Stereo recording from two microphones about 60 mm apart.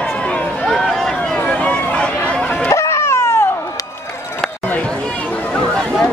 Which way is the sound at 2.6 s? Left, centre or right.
Left.